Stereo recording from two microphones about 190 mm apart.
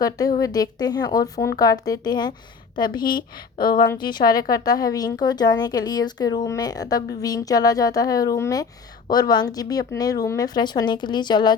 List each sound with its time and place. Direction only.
0.0 s a woman's voice: 20° left (ahead or behind)